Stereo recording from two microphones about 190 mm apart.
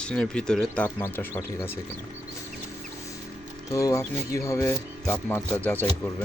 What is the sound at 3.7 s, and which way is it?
Speech, 15° left (ahead or behind).